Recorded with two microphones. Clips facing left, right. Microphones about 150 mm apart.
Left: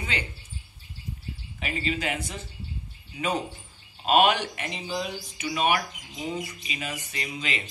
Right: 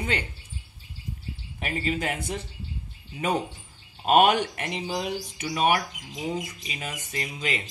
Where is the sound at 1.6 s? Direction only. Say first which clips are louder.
Right 1 dB; 45° right (ahead or behind).